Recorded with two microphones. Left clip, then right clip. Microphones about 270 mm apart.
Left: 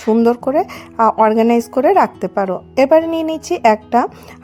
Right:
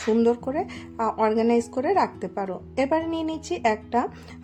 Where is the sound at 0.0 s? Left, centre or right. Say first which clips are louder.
Left 8 dB; left.